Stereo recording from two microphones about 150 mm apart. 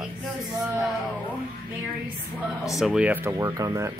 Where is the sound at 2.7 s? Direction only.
5° right (ahead or behind); by 3.9 s 20° right (ahead or behind).